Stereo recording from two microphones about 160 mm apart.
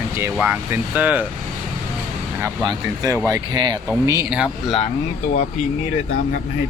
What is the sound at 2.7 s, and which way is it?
Speech, 20° right (ahead or behind).